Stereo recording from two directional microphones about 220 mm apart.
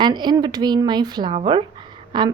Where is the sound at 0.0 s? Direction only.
20° right (ahead or behind).